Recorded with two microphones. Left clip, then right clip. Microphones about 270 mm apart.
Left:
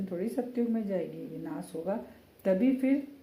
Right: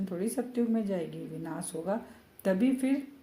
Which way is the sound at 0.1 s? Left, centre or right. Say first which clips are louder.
Left 1 dB; right.